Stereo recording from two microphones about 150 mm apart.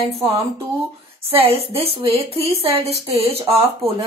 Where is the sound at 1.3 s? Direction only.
40° right (ahead or behind).